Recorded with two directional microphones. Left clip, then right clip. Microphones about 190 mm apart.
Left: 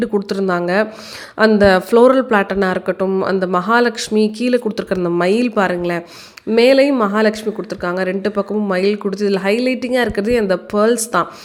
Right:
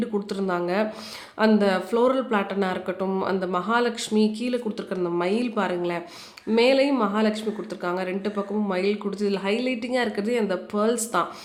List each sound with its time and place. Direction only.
0.0 s speech: 35° left (ahead or behind)